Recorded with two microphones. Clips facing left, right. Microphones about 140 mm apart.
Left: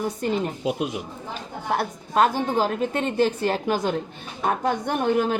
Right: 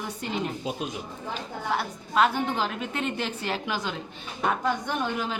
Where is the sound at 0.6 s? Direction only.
75° left (ahead or behind).